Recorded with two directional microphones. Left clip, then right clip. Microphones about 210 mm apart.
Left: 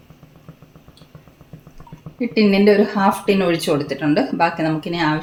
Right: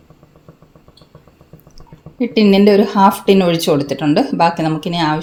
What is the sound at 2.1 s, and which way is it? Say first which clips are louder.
A woman's voice: right 4 dB; 40° right (ahead or behind).